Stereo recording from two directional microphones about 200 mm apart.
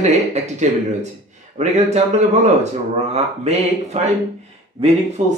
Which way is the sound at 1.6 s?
35° right (ahead or behind).